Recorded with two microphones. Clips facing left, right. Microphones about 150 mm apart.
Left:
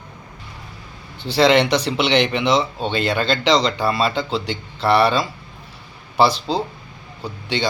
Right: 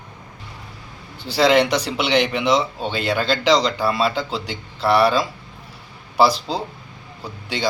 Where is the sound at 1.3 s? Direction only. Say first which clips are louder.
Left 1 dB; 5° right (ahead or behind).